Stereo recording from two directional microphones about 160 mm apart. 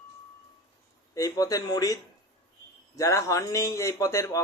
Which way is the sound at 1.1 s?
20° left (ahead or behind).